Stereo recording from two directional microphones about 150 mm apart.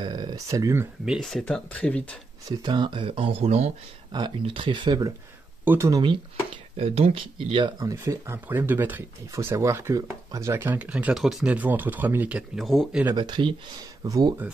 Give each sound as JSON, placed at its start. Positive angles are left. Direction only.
{"t": 0.0, "sound": "speech", "side_deg": -30}
{"t": 1.0, "sound": "speech", "side_deg": 0}
{"t": 2.6, "sound": "speech", "side_deg": -30}
{"t": 4.1, "sound": "speech", "side_deg": -30}
{"t": 6.5, "sound": "speech", "side_deg": -40}
{"t": 13.1, "sound": "speech", "side_deg": -30}